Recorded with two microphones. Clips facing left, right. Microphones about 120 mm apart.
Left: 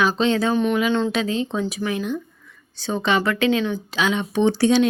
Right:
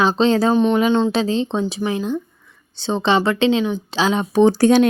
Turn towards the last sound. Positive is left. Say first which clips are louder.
# right 4 dB
turn(degrees=-50)  # may be behind; listen again after turning